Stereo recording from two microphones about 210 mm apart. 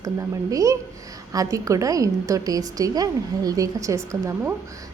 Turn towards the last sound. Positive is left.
turn(degrees=-15)  # may be behind; listen again after turning